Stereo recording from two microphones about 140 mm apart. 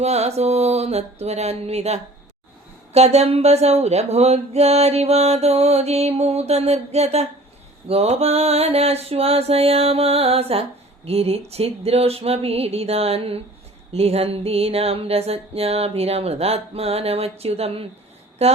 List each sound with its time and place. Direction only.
0.0 s mantra: 50° right (ahead or behind)